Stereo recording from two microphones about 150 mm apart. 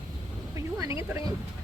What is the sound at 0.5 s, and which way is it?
Speech, 20° right (ahead or behind).